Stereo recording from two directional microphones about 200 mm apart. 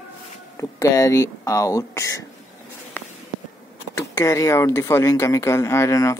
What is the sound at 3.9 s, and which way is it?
Speech, 15° left (ahead or behind).